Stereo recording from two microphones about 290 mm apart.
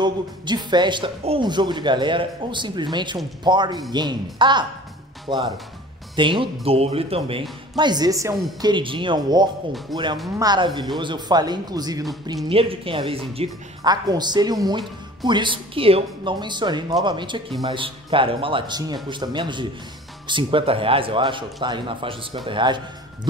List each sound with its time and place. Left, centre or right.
0.0 s speech: centre
9.9 s speech: centre
10.4 s speech: centre